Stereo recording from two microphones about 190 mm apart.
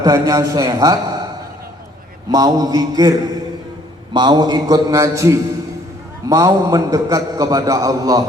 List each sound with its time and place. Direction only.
0.0 s a man's voice: 20° right (ahead or behind)
2.3 s a man's voice: 20° right (ahead or behind)